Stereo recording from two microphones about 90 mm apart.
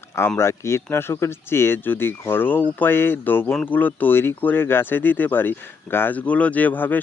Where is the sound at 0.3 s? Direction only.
30° left (ahead or behind).